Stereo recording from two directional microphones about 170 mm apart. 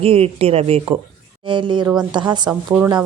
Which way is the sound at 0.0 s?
35° right (ahead or behind).